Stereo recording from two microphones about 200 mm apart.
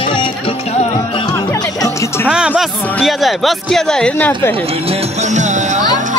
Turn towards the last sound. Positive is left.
turn(degrees=-35)  # may be behind; listen again after turning